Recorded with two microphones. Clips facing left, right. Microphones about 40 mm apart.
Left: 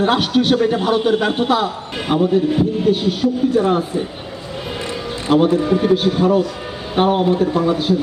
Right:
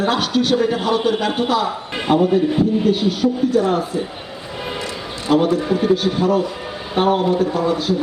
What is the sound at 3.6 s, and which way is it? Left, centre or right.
Speech, left.